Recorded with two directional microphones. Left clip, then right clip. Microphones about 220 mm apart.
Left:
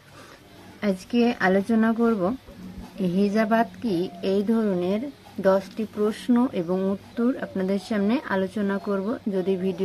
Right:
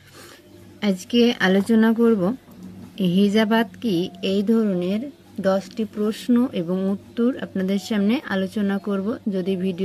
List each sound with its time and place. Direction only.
0.7 s a woman's voice: 40° right (ahead or behind)